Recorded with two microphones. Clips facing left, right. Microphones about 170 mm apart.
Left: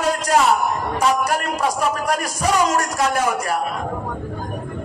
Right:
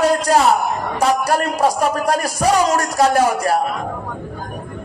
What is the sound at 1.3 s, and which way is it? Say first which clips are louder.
Speech: right 4 dB; 35° right (ahead or behind).